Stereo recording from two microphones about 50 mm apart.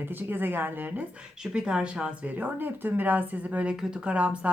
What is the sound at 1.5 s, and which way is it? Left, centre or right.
Speech, centre.